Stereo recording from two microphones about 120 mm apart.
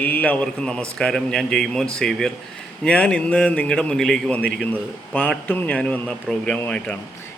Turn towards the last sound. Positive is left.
turn(degrees=10)  # may be behind; listen again after turning